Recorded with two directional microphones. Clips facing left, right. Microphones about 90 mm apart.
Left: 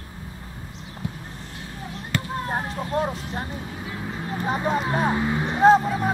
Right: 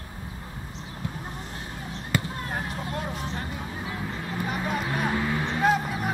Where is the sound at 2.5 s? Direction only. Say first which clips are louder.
Left 6 dB; 35° left (ahead or behind).